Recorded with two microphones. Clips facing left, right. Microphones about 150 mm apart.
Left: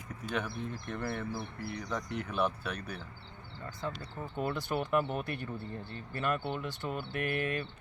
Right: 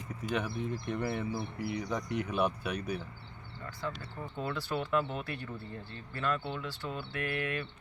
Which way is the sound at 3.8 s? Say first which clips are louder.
Even; 35° left (ahead or behind).